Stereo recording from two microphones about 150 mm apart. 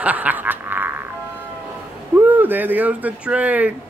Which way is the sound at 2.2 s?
10° right (ahead or behind).